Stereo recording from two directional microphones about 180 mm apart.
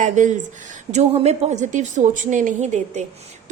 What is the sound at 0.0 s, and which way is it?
A woman's voice, 45° right (ahead or behind).